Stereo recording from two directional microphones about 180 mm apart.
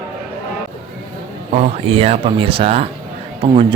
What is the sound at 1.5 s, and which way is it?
Speech, 35° right (ahead or behind).